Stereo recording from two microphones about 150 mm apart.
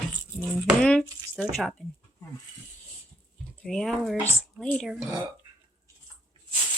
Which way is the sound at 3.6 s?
5° left (ahead or behind).